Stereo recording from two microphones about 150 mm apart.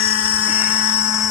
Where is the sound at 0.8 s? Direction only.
30° right (ahead or behind).